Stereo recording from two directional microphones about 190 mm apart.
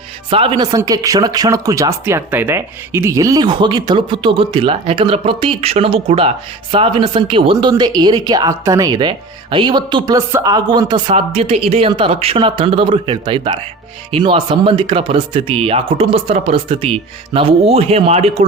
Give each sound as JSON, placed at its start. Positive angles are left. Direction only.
{"t": 0.3, "sound": "speech", "side_deg": -25}